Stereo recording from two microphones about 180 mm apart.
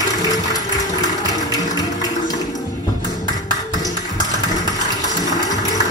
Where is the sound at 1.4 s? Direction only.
20° left (ahead or behind).